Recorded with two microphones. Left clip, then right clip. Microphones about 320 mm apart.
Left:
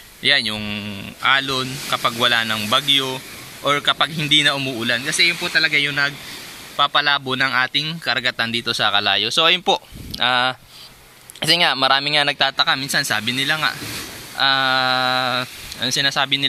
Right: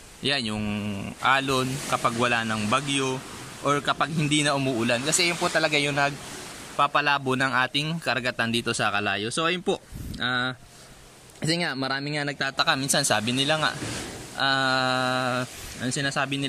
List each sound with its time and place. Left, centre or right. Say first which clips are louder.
0.2 s a man's voice: left 9 dB; centre
11.3 s speech: left 11 dB; left
12.4 s a man's voice: left 6 dB; centre